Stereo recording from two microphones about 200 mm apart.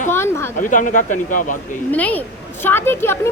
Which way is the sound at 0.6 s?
40° left (ahead or behind).